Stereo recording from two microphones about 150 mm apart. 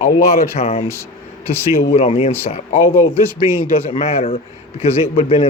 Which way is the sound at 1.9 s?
40° left (ahead or behind).